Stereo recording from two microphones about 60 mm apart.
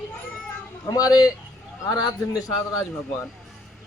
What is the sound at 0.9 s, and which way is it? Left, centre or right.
A man's voice, left.